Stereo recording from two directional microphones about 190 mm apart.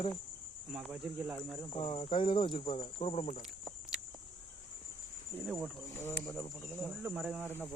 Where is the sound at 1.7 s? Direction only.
25° left (ahead or behind).